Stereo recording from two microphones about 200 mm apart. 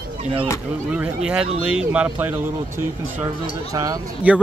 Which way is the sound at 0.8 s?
5° right (ahead or behind).